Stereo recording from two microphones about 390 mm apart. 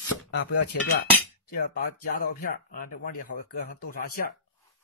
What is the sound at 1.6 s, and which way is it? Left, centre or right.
Speech, left.